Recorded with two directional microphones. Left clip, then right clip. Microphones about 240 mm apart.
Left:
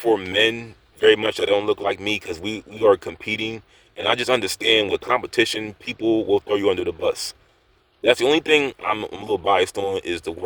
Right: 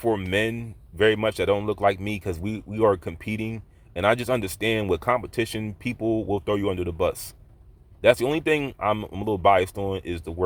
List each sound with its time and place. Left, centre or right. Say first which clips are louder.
0.0 s speech: left 5 dB; centre